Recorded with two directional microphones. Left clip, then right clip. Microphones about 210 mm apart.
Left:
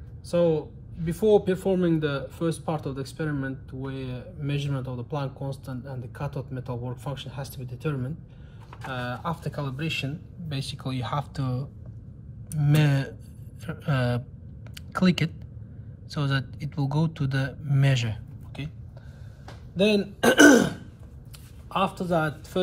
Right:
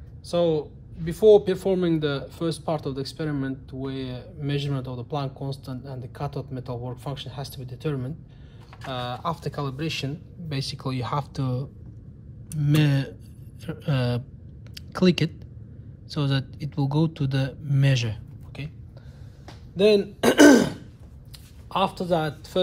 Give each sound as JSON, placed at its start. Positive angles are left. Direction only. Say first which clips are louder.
{"t": 0.4, "sound": "a man's voice", "louder": "even", "side_deg": -45}
{"t": 19.7, "sound": "speech", "louder": "right 4 dB", "side_deg": -40}